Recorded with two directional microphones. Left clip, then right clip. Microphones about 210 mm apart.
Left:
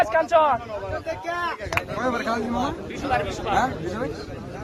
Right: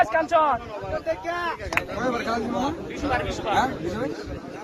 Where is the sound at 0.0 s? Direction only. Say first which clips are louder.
Left 1 dB; 50° left (ahead or behind).